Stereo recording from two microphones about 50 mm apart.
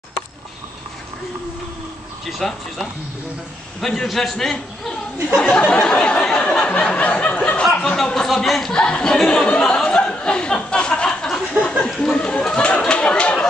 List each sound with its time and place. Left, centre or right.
2.2 s a man's voice: centre
5.7 s a sound: centre
7.6 s speech: centre
8.7 s a sound: centre
12.0 s speech: centre
12.4 s chatter: left